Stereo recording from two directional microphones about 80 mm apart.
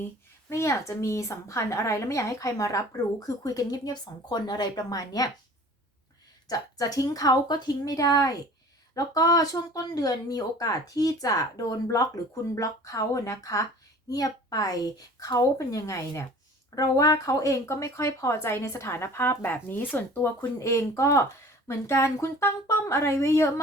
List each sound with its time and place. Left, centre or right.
0.5 s a woman's voice: left
6.5 s a woman's voice: left
20.6 s speech: left